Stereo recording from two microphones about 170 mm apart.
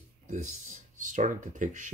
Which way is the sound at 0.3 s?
45° right (ahead or behind).